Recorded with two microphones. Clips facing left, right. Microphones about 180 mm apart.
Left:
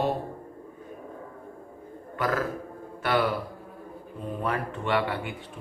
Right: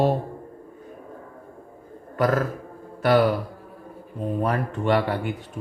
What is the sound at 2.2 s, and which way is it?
Speech, 40° right (ahead or behind).